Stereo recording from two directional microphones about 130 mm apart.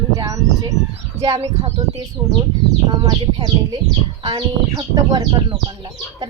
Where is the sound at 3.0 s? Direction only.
35° right (ahead or behind).